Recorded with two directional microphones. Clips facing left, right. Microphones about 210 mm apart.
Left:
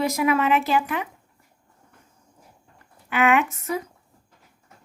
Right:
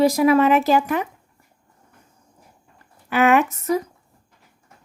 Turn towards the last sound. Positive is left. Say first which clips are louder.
# right 4 dB
turn(degrees=-40)  # may be behind; listen again after turning